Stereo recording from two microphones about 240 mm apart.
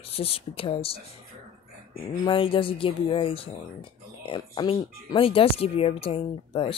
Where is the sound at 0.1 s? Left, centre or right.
Left.